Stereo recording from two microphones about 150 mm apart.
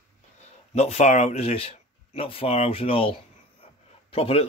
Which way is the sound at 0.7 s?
45° left (ahead or behind).